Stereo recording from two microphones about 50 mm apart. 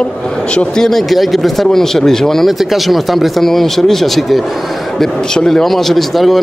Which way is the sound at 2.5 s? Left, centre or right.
Centre.